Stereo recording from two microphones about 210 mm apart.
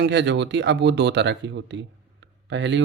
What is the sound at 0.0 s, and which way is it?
Speech, 55° right (ahead or behind).